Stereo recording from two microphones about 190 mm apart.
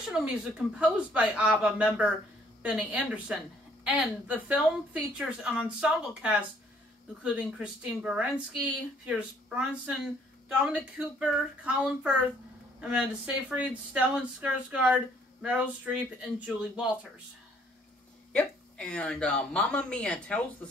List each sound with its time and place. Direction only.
0.1 s a woman's voice: 5° right (ahead or behind)
18.3 s a woman's voice: 5° left (ahead or behind)